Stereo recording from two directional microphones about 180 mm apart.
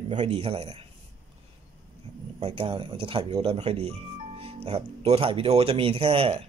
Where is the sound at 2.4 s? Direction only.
30° right (ahead or behind).